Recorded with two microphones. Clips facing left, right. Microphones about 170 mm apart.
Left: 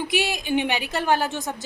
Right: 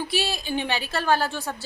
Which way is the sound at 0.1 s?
15° left (ahead or behind).